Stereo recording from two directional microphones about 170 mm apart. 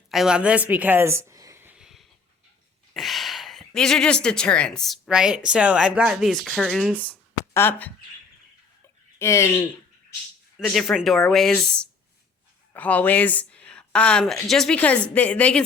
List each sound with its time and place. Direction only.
0.1 s a sound: 5° right (ahead or behind)
3.8 s a woman's voice: 5° left (ahead or behind)
9.1 s a woman's voice: 15° left (ahead or behind)
10.6 s a woman's voice: centre (ahead or behind)